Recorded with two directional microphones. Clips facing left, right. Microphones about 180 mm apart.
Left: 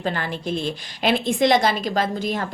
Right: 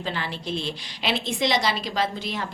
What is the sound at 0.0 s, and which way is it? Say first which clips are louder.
A woman's voice: left 5 dB; 50° left (ahead or behind).